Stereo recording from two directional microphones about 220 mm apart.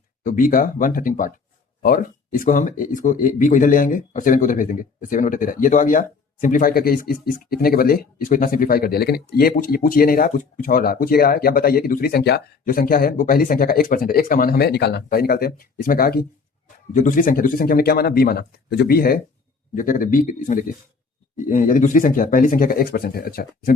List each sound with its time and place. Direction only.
0.2 s speech: 35° left (ahead or behind)